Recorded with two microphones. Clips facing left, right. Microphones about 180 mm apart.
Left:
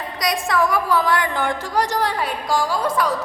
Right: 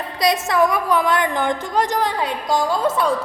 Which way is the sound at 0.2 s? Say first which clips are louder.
Right 3 dB; 25° right (ahead or behind).